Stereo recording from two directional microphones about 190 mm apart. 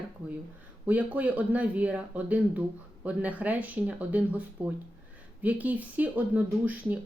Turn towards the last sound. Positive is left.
turn(degrees=-10)  # may be behind; listen again after turning